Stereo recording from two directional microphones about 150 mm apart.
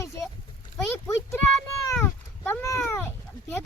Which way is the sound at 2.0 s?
15° left (ahead or behind).